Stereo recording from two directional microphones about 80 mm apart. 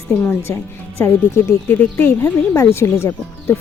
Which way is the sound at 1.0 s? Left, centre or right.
Left.